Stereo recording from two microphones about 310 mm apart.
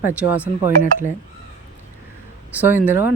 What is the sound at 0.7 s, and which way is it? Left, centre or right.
Speech, right.